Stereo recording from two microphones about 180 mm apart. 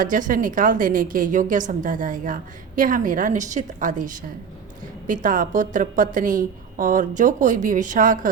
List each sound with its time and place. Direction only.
0.0 s a woman's voice: 45° right (ahead or behind)